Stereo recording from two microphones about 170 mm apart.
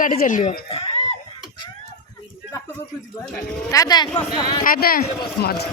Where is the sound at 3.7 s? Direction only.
20° left (ahead or behind).